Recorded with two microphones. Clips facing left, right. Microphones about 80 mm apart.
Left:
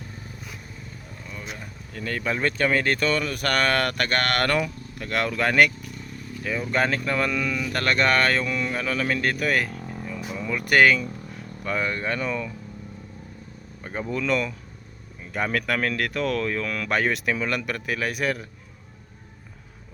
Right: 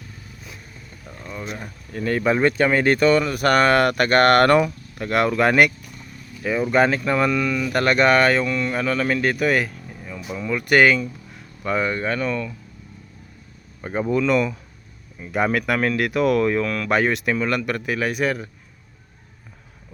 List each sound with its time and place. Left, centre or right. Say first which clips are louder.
1.3 s a sound: right 6 dB; right
1.9 s speech: right 8 dB; right; by 7.7 s centre
7.7 s speech: right 5 dB; centre
8.4 s speech: right 4 dB; centre
13.8 s speech: right 6 dB; centre
16.6 s speech: right 4 dB; centre